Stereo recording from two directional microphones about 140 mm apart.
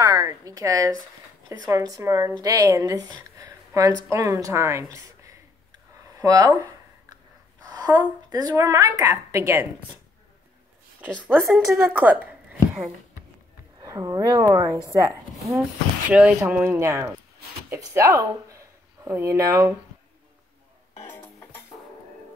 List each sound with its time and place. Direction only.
0.0 s a sound: 25° right (ahead or behind)
1.5 s a woman's voice: 25° right (ahead or behind)
3.2 s a sound: 20° right (ahead or behind)
7.7 s a woman's voice: 30° right (ahead or behind)
11.2 s speech: 15° right (ahead or behind)
13.7 s a woman's voice: 25° right (ahead or behind)
16.1 s a woman's voice: 10° right (ahead or behind)
21.1 s music: 15° left (ahead or behind)